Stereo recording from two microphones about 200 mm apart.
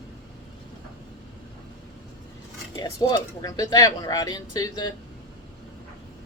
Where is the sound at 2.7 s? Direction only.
20° left (ahead or behind).